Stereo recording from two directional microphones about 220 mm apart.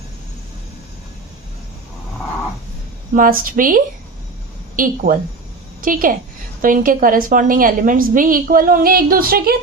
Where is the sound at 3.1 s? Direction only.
40° right (ahead or behind).